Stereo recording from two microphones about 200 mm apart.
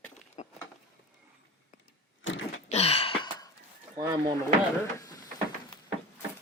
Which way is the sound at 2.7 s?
30° left (ahead or behind).